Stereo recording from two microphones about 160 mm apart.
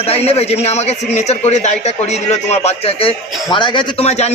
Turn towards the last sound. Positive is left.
turn(degrees=40)  # may be behind; listen again after turning